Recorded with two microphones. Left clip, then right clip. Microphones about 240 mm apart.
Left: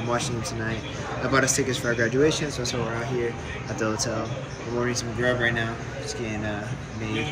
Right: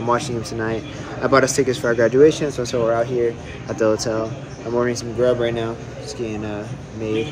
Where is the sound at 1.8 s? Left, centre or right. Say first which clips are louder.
Right 8 dB; right.